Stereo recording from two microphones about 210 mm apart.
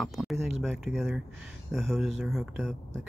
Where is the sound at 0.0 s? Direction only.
Centre (ahead or behind).